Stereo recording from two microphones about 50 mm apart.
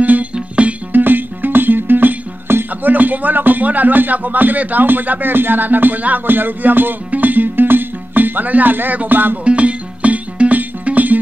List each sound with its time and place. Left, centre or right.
0.0 s music: right
1.0 s music: right
2.9 s speech: right
9.4 s music: right